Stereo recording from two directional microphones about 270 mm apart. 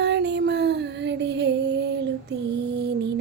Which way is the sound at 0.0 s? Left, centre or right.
Right.